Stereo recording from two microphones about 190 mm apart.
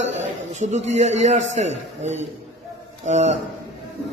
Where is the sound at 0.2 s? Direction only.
40° right (ahead or behind).